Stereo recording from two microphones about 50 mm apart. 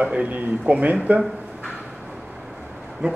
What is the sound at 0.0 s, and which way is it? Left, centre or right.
Speech, right.